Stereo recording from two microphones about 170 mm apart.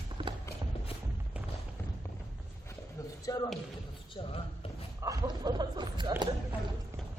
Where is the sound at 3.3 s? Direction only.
20° left (ahead or behind).